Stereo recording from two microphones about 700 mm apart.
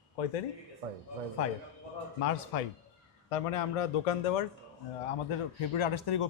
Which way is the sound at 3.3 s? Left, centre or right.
Left.